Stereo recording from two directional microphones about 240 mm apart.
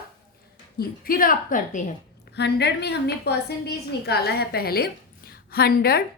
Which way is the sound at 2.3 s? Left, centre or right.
Left.